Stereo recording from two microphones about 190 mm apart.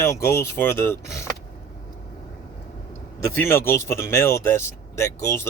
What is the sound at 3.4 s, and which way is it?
Speech, 15° left (ahead or behind).